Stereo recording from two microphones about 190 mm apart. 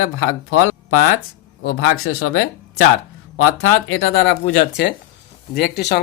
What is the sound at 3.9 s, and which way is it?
Speech, 85° left.